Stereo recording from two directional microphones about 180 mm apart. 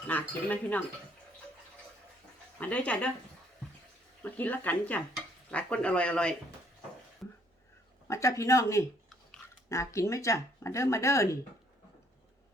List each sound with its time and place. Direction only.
0.1 s speech: 10° left (ahead or behind)
2.6 s speech: 5° left (ahead or behind)
4.2 s speech: 10° left (ahead or behind)
7.2 s a sound: 5° left (ahead or behind)
8.0 s speech: 15° left (ahead or behind)